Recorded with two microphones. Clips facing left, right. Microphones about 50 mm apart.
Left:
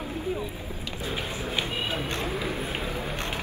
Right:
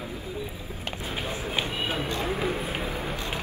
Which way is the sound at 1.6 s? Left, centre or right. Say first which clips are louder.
Right 1 dB; right.